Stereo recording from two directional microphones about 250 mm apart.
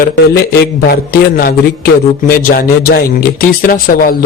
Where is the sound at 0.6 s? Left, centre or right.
Left.